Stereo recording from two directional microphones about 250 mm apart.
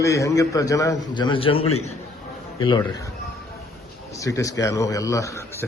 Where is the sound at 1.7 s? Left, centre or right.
Left.